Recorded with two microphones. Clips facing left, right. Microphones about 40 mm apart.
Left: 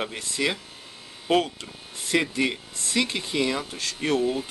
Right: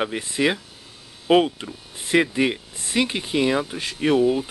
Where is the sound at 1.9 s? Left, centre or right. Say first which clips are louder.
Right 5 dB; centre.